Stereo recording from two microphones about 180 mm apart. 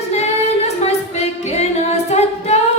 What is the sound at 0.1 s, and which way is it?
Female singing, 35° left (ahead or behind).